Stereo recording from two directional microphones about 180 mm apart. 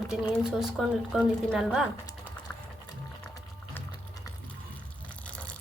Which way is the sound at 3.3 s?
20° left (ahead or behind).